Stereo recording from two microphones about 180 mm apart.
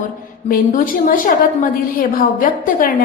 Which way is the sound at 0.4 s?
55° left (ahead or behind).